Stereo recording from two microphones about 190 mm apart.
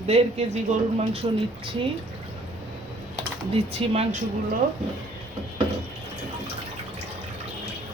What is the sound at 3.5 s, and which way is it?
Speech, 30° right (ahead or behind).